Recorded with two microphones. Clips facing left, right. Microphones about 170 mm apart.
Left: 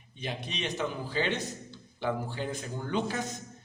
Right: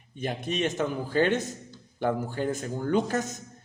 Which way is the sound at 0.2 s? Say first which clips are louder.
Right 7 dB; 50° right (ahead or behind).